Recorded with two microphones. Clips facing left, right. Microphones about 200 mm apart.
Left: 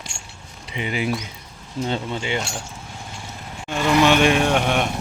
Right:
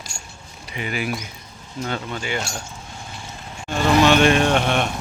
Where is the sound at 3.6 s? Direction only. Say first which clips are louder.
Right 1 dB; 15° left (ahead or behind).